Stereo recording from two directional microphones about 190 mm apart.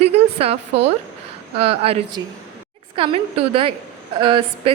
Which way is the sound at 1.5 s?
30° right (ahead or behind).